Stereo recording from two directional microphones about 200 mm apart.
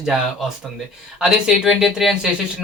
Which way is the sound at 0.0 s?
Centre (ahead or behind).